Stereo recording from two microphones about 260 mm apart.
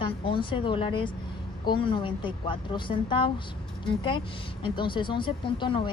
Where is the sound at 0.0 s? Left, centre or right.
Centre.